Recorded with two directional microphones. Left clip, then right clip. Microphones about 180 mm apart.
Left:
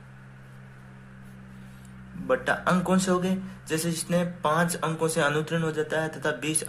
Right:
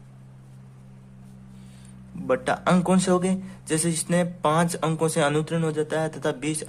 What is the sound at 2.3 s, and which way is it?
Speech, 30° right (ahead or behind).